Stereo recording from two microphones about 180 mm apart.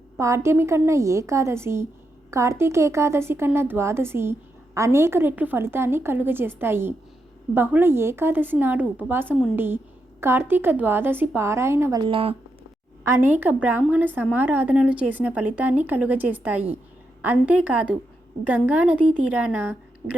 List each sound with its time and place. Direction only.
0.2 s speech: 15° right (ahead or behind); by 12.4 s 30° right (ahead or behind)
13.1 s speech: 15° right (ahead or behind)